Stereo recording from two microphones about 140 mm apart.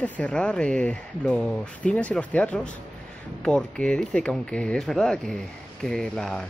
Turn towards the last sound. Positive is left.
turn(degrees=5)  # may be behind; listen again after turning